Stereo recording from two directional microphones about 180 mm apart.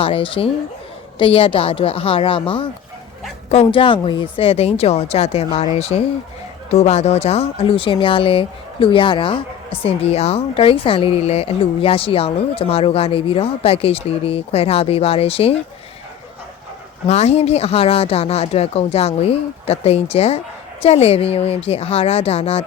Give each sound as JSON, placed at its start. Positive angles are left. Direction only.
{"t": 0.0, "sound": "speech", "side_deg": 30}
{"t": 17.1, "sound": "speech", "side_deg": 35}